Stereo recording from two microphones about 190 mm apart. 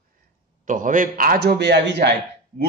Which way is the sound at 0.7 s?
45° right (ahead or behind).